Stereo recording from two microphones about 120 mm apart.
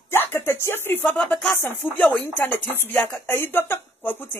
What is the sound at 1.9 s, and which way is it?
Speech, 15° left (ahead or behind).